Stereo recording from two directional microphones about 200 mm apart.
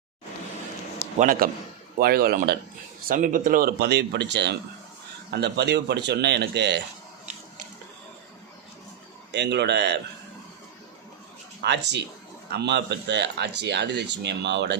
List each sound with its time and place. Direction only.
1.2 s a man's voice: 45° right (ahead or behind)
9.3 s speech: 60° right (ahead or behind)
11.6 s speech: 60° right (ahead or behind)